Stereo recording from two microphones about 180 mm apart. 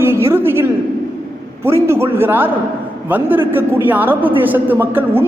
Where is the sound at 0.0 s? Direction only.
15° right (ahead or behind).